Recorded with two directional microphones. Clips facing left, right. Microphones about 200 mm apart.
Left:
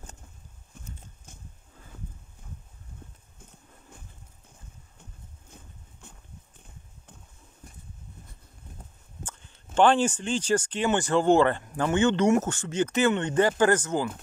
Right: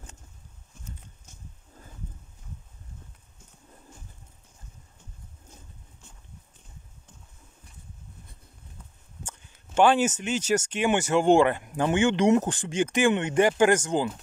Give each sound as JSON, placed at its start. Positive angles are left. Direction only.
{"t": 6.0, "sound": "boat", "side_deg": 60}
{"t": 7.6, "sound": "a sound", "side_deg": 45}
{"t": 9.8, "sound": "speech", "side_deg": -10}